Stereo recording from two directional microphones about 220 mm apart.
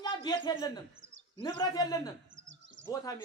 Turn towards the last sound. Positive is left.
turn(degrees=15)  # may be behind; listen again after turning